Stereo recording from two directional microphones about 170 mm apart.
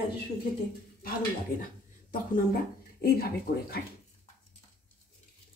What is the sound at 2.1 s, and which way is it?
Speech, 55° left (ahead or behind).